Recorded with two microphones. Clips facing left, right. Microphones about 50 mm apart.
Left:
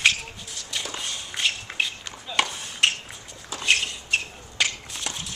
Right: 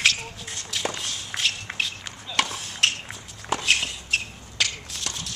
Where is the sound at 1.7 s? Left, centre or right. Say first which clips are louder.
Left 1 dB; right.